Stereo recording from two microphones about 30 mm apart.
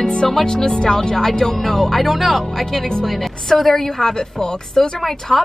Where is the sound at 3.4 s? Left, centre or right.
Centre.